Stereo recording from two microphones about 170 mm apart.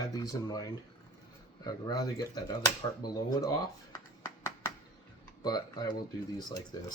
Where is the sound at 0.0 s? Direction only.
20° left (ahead or behind).